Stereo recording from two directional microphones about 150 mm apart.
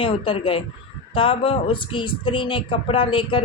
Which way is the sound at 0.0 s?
35° left (ahead or behind).